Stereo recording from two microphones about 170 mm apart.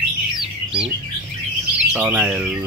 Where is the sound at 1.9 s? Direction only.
10° right (ahead or behind).